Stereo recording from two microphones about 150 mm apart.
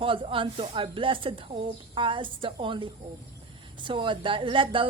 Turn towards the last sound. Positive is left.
turn(degrees=-35)  # may be behind; listen again after turning